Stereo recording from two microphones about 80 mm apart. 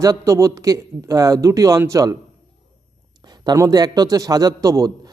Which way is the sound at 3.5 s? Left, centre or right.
Right.